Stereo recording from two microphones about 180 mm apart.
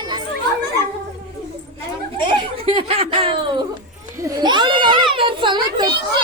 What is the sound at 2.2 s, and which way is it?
Snicker, 30° right (ahead or behind).